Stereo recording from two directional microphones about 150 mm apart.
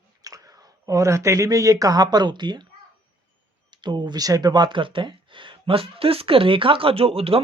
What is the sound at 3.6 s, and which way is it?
Speech, 30° right (ahead or behind).